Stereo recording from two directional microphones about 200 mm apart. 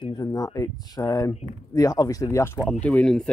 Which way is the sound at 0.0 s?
20° left (ahead or behind).